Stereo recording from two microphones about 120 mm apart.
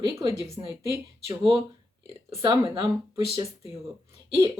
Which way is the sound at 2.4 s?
40° right (ahead or behind).